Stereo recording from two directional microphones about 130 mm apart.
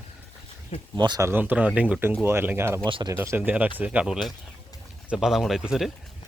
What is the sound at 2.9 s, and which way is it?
Speech, 40° right (ahead or behind).